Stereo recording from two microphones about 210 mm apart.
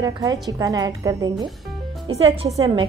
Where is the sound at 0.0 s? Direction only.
15° right (ahead or behind).